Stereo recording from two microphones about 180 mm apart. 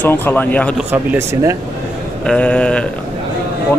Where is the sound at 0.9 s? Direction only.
15° right (ahead or behind).